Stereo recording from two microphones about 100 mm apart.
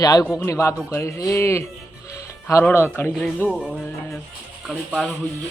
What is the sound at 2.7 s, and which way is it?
Speech, 25° left (ahead or behind).